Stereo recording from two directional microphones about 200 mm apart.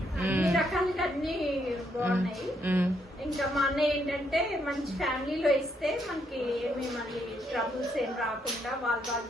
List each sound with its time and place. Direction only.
0.2 s a sound: 5° right (ahead or behind)
2.0 s a woman's voice: 10° right (ahead or behind)
7.5 s a woman's voice: centre (ahead or behind)